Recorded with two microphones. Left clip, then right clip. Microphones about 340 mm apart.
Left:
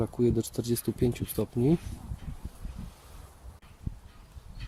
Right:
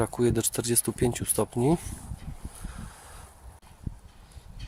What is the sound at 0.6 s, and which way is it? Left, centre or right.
Speech, centre.